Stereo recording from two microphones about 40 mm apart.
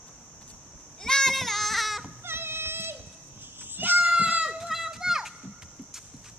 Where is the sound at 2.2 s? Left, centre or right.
Right.